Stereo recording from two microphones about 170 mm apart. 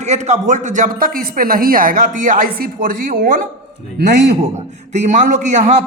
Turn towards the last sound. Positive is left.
turn(degrees=-45)  # may be behind; listen again after turning